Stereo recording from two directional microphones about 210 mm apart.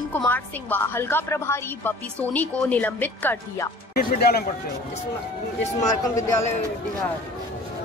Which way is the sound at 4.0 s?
45° left (ahead or behind).